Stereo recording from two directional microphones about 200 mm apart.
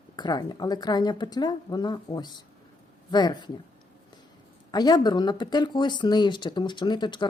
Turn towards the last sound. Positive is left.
turn(degrees=25)  # may be behind; listen again after turning